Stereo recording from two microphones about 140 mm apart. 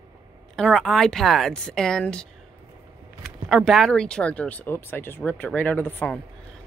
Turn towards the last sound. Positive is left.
turn(degrees=10)  # may be behind; listen again after turning